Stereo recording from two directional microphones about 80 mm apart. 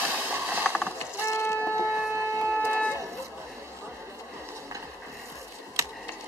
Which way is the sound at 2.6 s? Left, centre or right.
Centre.